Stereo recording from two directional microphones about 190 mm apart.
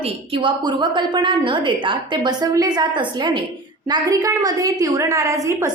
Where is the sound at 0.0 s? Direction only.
30° right (ahead or behind).